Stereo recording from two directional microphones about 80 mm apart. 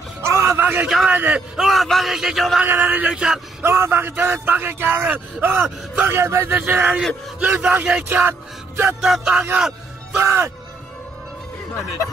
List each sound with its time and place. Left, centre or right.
0.2 s a sound: right
0.6 s a sound: right
0.8 s a man's voice: centre
1.1 s speech: right
1.6 s a man's voice: centre
2.6 s speech: right
3.1 s music: centre
3.6 s speech: right
9.0 s music: centre
10.1 s speech: right